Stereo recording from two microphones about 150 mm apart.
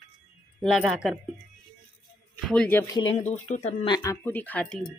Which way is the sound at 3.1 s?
50° left (ahead or behind).